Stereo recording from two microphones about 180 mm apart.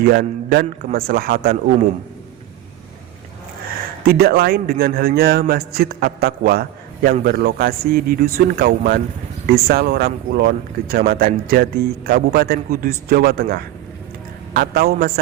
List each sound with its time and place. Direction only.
0.0 s a man's voice: 60° right (ahead or behind)
4.0 s a man's voice: 55° right (ahead or behind)